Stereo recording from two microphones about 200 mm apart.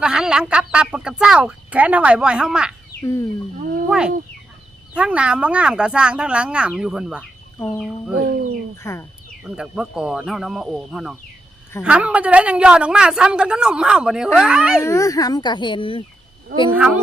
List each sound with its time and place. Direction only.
0.0 s speech: 5° right (ahead or behind)
3.0 s speech: 15° left (ahead or behind)
3.8 s speech: 5° right (ahead or behind)
8.8 s speech: 15° left (ahead or behind)
9.6 s speech: 5° right (ahead or behind)
14.8 s a child's voice: 15° left (ahead or behind)
16.7 s a child's voice: 5° right (ahead or behind)